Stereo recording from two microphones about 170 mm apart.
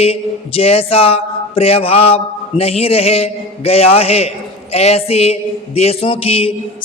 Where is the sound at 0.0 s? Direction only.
35° left (ahead or behind).